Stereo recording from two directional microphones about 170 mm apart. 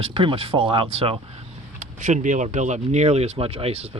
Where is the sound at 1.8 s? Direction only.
45° right (ahead or behind).